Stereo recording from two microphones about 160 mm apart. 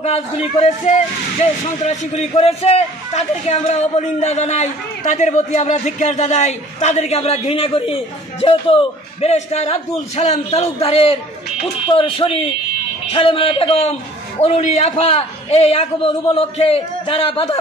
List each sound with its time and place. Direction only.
0.0 s a man's voice: 40° left (ahead or behind)